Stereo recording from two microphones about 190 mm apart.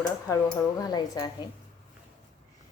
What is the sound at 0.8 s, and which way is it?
Speech, 20° left (ahead or behind).